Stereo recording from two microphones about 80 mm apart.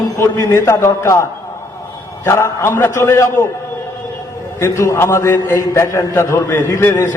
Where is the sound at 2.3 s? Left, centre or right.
Left.